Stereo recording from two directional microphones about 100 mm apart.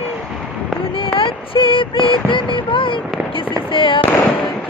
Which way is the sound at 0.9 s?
65° left (ahead or behind).